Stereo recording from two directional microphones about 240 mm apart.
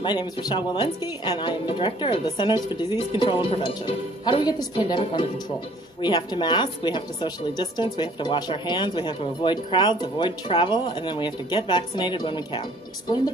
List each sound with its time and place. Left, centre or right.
0.0 s a woman's voice: centre